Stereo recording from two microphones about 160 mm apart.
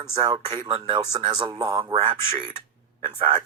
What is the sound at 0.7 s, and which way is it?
Speech, 30° right (ahead or behind).